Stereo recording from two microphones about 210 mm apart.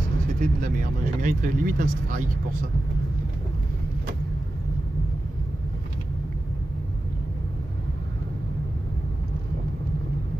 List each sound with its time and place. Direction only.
0.4 s speech: 40° right (ahead or behind)